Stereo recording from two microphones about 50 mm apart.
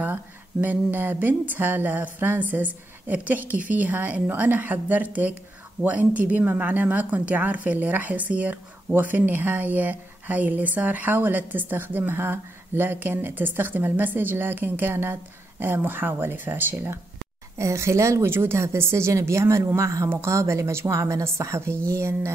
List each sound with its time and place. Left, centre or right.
0.0 s a woman's voice: right
17.6 s speech: right
18.3 s speech: right